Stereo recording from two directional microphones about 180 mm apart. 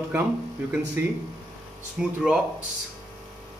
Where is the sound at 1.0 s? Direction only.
15° right (ahead or behind).